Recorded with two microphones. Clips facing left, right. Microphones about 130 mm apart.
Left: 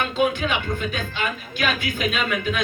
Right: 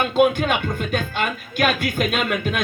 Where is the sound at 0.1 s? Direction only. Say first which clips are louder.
Right 4 dB; 50° right (ahead or behind).